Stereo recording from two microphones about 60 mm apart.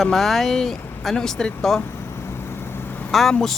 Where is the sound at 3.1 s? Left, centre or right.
Centre.